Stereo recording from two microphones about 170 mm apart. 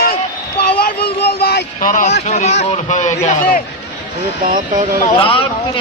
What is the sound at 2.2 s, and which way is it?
A man's voice, 40° left (ahead or behind).